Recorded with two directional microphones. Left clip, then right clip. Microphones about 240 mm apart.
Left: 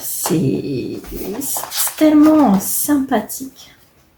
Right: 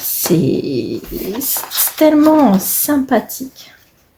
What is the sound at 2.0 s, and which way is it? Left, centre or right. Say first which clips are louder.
Speech: right 1 dB; right.